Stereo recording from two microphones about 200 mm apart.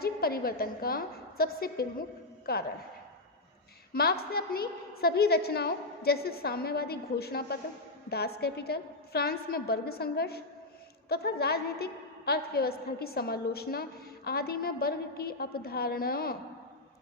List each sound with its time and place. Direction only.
0.0 s a woman's voice: 50° left (ahead or behind)
3.9 s a woman's voice: 50° left (ahead or behind)